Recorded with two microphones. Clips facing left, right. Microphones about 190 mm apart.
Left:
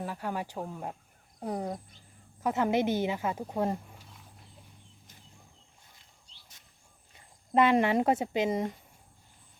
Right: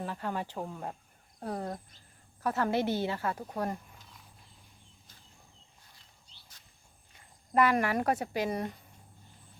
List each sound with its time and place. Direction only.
0.0 s a woman's voice: 10° left (ahead or behind)
7.5 s speech: 25° left (ahead or behind)